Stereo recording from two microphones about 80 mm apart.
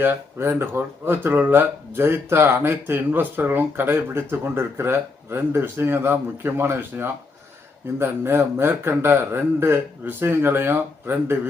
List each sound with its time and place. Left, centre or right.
0.0 s speech: right